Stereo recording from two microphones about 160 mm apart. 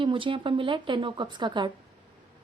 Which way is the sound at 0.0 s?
30° right (ahead or behind).